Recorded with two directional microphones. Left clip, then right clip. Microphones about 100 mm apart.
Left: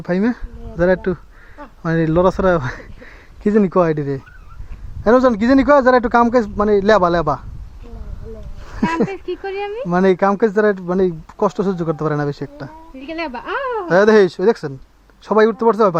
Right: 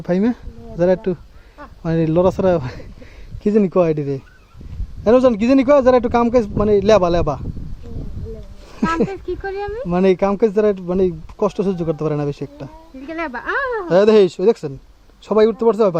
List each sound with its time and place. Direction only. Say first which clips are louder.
0.0 s speech: even; 30° right (ahead or behind)
0.8 s speech: left 1 dB; 20° right (ahead or behind)
8.7 s a sound: even; 10° right (ahead or behind)
9.7 s a woman's voice: left 1 dB; 10° right (ahead or behind)